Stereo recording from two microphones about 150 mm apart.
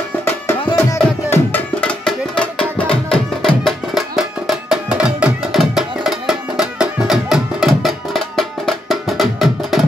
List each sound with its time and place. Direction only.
0.6 s tabla: 30° left (ahead or behind)
1.3 s music: 10° left (ahead or behind)